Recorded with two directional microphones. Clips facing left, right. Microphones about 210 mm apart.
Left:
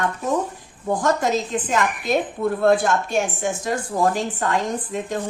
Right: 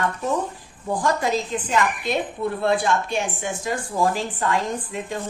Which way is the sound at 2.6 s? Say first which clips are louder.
Left 3 dB; 45° left (ahead or behind).